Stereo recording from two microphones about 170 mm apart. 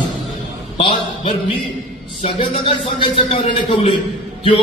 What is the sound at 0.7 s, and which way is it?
A man's voice, 35° left (ahead or behind).